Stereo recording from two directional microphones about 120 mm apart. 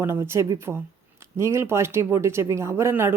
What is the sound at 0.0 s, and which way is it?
Speech, 20° right (ahead or behind).